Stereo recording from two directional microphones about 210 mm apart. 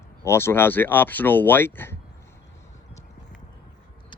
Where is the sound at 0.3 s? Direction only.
10° left (ahead or behind).